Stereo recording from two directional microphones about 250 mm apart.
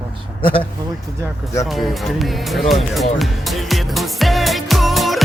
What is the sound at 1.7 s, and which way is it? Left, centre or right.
Music, centre.